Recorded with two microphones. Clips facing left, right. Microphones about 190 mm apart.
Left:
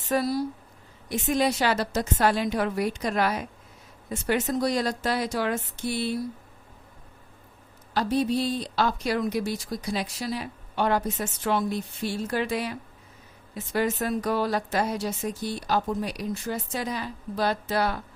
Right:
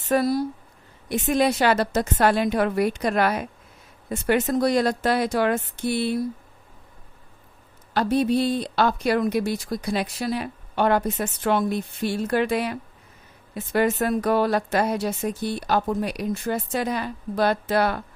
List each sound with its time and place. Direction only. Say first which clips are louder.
0.1 s speech: right 4 dB; 55° right (ahead or behind)
7.9 s speech: right 4 dB; 60° right (ahead or behind)